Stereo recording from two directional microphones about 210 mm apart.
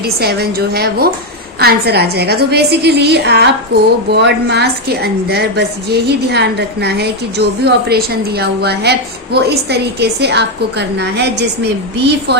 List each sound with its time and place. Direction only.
0.0 s a woman's voice: 50° right (ahead or behind)